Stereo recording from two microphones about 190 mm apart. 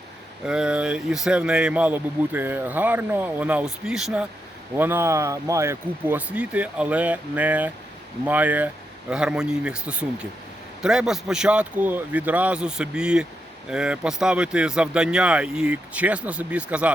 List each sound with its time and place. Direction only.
0.4 s speech: 5° right (ahead or behind)